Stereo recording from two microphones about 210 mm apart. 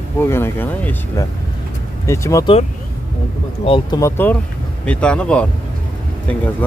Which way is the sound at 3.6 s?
25° left (ahead or behind).